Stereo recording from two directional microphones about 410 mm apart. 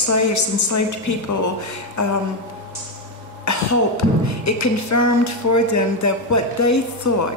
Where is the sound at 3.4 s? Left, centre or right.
Left.